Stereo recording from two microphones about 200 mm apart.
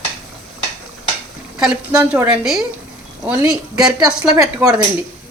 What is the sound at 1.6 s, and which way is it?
A woman's voice, 5° right (ahead or behind).